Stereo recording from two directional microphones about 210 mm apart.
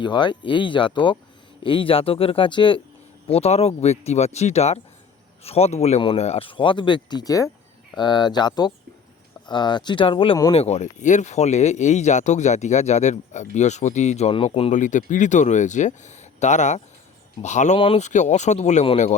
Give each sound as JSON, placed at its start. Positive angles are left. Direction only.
{"t": 0.0, "sound": "speech", "side_deg": 20}